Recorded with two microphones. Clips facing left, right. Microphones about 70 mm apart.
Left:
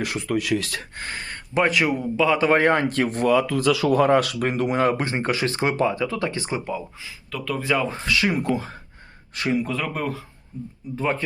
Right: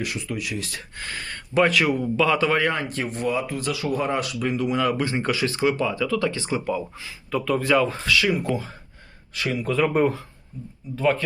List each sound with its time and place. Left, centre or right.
0.0 s speech: left
0.9 s speech: left
1.3 s speech: centre
2.6 s speech: left
2.9 s speech: left
6.7 s speech: centre
7.3 s speech: centre
7.6 s speech: centre
7.9 s speech: left
9.8 s speech: centre
10.9 s speech: left